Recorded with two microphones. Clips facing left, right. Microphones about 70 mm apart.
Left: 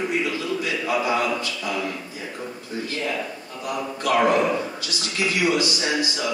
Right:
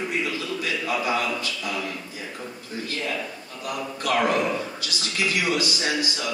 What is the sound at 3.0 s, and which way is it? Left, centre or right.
A man's voice, centre.